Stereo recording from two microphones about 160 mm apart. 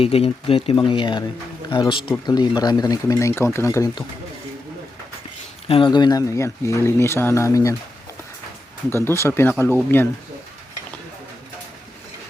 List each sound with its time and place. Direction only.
0.0 s speech: 40° left (ahead or behind); by 4.0 s 20° left (ahead or behind)
5.6 s speech: 35° left (ahead or behind)
8.9 s speech: 15° left (ahead or behind)